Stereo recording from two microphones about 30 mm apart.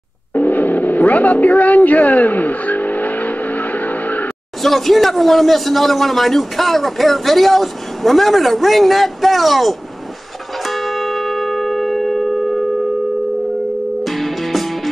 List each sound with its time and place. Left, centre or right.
0.3 s gong: left
4.6 s a man's voice: centre
10.7 s church bell: centre
14.0 s music: centre